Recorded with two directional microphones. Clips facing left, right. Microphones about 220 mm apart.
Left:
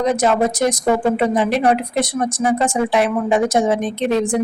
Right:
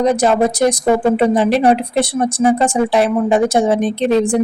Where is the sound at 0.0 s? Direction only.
35° right (ahead or behind).